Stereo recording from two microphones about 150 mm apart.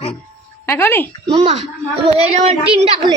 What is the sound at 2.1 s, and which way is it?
Speech, 40° right (ahead or behind).